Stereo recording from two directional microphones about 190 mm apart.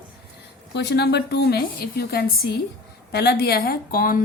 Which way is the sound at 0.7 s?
60° left (ahead or behind).